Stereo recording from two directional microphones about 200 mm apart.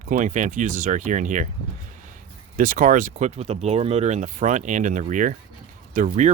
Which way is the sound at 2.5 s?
40° right (ahead or behind).